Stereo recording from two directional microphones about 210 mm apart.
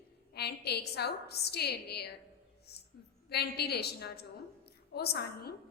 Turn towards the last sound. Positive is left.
turn(degrees=50)  # may be behind; listen again after turning